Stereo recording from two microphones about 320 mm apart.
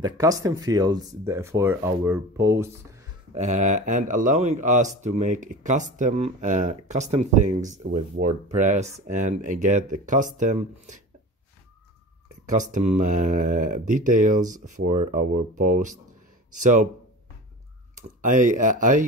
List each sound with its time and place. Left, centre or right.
0.0 s speech: centre
3.3 s speech: right
12.4 s speech: right
17.9 s speech: right